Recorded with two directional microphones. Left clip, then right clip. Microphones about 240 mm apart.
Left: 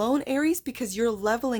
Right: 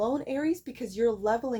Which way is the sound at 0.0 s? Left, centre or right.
Left.